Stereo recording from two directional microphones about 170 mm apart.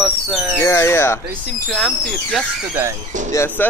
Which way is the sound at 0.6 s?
15° left (ahead or behind).